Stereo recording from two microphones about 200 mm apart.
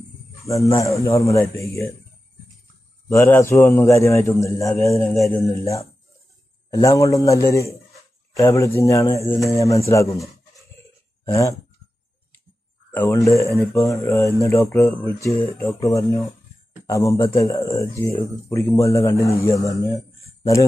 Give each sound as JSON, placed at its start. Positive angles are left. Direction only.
{"t": 0.5, "sound": "a man's voice", "side_deg": 15}
{"t": 3.1, "sound": "a man's voice", "side_deg": 15}
{"t": 11.2, "sound": "a man's voice", "side_deg": 15}
{"t": 12.9, "sound": "a man's voice", "side_deg": 10}